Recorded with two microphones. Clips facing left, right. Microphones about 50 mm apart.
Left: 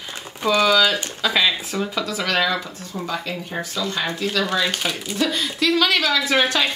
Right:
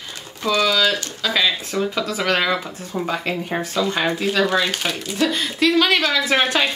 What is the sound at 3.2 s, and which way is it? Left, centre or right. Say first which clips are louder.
Speech: right 4 dB; right.